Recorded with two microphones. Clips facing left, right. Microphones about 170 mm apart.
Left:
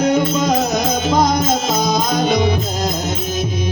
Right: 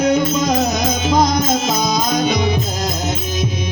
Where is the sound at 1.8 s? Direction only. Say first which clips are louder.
Even; 50° left (ahead or behind).